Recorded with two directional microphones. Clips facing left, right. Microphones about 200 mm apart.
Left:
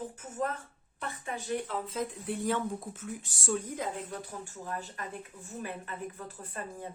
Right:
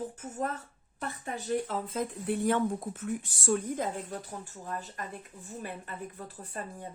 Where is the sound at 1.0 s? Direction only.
40° right (ahead or behind).